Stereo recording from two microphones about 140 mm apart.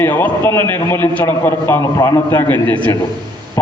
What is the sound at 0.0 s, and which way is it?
A man's voice, 15° left (ahead or behind).